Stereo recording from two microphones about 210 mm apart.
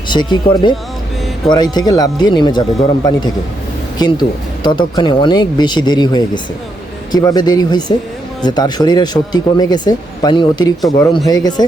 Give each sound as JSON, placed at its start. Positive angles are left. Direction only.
{"t": 0.1, "sound": "speech", "side_deg": 20}